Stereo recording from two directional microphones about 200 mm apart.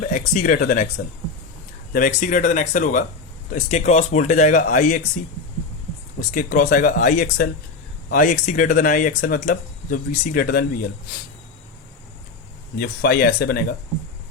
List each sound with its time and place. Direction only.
0.1 s speech: 40° left (ahead or behind)
1.9 s speech: 40° left (ahead or behind)
6.3 s speech: 45° left (ahead or behind)
12.8 s speech: 50° left (ahead or behind)